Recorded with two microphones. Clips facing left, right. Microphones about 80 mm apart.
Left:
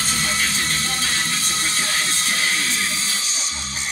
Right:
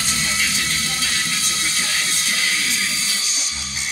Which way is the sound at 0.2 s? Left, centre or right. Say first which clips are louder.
Even; left.